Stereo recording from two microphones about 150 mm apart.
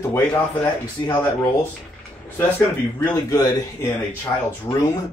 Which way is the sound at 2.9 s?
20° left (ahead or behind).